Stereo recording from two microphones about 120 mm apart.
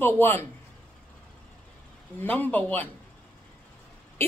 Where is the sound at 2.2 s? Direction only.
15° left (ahead or behind).